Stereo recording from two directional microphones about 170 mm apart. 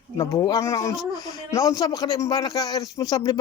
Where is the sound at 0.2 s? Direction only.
20° left (ahead or behind).